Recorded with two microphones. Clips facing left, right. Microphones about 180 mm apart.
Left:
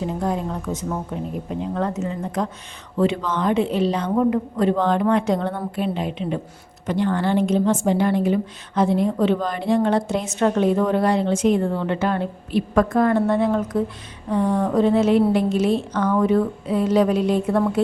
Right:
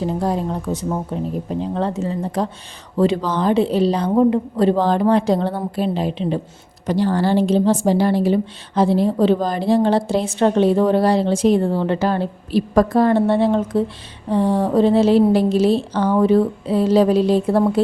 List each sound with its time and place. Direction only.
0.2 s a woman's voice: 35° right (ahead or behind)